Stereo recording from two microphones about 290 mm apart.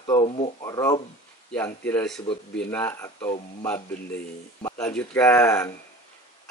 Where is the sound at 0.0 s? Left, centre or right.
Centre.